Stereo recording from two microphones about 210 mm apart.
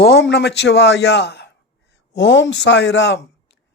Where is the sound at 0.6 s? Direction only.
55° left (ahead or behind).